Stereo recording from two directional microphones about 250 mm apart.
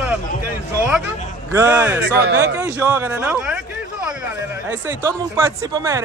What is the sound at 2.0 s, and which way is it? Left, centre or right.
Speech, right.